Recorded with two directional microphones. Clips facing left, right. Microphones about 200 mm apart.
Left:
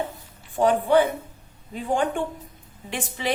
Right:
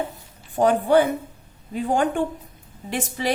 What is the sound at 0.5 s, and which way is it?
Speech, 45° right (ahead or behind).